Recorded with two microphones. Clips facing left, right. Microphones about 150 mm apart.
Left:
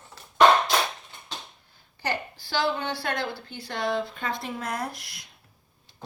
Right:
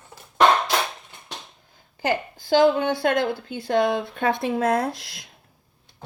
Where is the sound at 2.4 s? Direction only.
45° right (ahead or behind).